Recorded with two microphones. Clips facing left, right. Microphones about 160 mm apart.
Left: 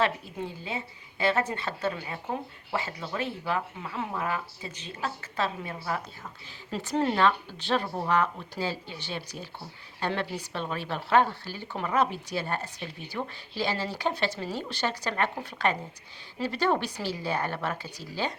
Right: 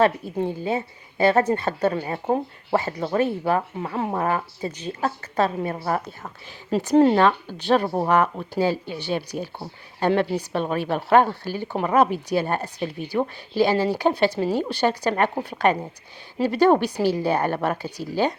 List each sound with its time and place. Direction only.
0.0 s a woman's voice: 45° right (ahead or behind)
12.6 s a woman's voice: 40° right (ahead or behind)
14.1 s speech: 35° right (ahead or behind)
14.4 s a woman's voice: 55° right (ahead or behind)
15.4 s a woman's voice: 55° right (ahead or behind)